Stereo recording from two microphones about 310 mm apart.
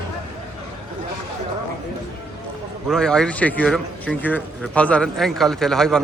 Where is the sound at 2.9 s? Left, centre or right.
Centre.